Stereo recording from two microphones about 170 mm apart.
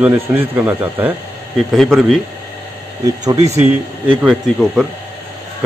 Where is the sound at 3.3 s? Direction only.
40° right (ahead or behind).